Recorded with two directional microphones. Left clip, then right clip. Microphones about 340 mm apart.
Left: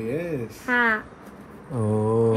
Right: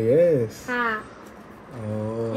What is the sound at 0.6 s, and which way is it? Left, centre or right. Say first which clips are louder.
Speech: left 9 dB; centre.